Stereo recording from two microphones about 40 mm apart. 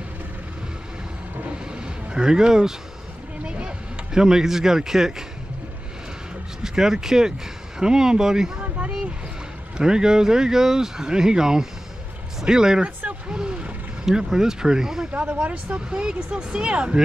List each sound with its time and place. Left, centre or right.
1.7 s a sound: centre
6.6 s speech: centre
9.8 s speech: centre
13.3 s a sound: right
14.0 s speech: centre
15.1 s speech: right
16.0 s speech: centre